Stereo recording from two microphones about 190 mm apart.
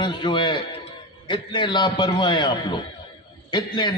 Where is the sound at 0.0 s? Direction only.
25° left (ahead or behind).